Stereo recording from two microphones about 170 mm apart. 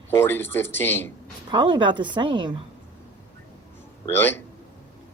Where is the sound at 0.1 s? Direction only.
15° left (ahead or behind).